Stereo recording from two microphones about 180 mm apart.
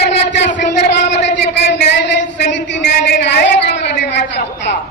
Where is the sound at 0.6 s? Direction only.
75° left (ahead or behind).